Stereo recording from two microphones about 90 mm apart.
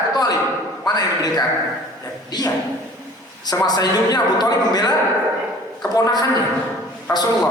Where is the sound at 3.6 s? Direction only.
45° left (ahead or behind).